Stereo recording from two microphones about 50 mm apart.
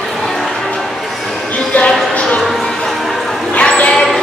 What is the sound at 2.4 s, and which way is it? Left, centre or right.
Music, centre.